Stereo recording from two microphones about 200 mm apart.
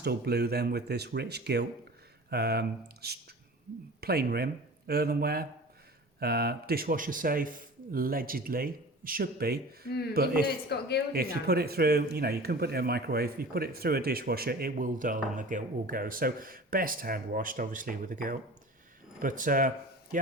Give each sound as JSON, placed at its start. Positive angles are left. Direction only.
{"t": 0.0, "sound": "speech", "side_deg": -55}
{"t": 10.4, "sound": "a man's voice", "side_deg": 55}
{"t": 11.1, "sound": "speech", "side_deg": -50}